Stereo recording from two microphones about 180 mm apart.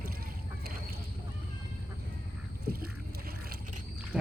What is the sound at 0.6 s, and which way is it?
Duck, 55° right (ahead or behind).